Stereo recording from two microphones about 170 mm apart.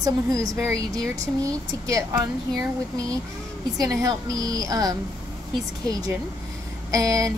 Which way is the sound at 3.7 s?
20° right (ahead or behind).